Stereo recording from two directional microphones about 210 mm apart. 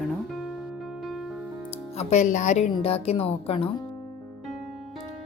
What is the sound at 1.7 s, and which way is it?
A woman's voice, 30° left (ahead or behind).